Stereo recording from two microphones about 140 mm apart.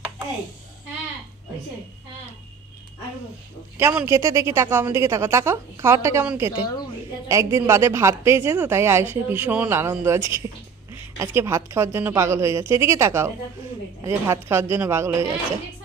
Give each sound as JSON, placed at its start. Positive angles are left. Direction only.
{"t": 3.8, "sound": "speech", "side_deg": -15}
{"t": 6.5, "sound": "speech", "side_deg": 30}
{"t": 7.3, "sound": "speech", "side_deg": -20}